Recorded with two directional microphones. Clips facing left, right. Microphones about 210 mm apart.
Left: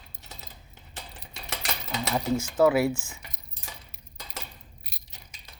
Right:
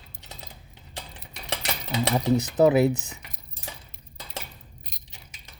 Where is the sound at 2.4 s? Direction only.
20° right (ahead or behind).